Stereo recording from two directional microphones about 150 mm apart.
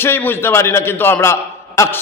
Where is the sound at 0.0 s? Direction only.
15° left (ahead or behind).